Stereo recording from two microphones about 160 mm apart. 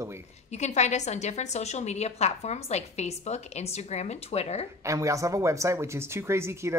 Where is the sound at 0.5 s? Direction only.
45° left (ahead or behind).